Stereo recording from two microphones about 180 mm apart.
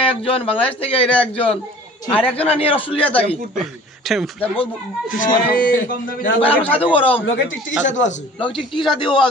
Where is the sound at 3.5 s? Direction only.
Centre (ahead or behind).